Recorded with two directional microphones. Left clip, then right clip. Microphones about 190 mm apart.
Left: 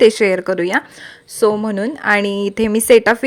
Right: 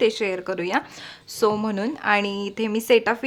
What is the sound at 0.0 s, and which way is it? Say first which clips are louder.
A woman's voice: left 10 dB; 30° left (ahead or behind).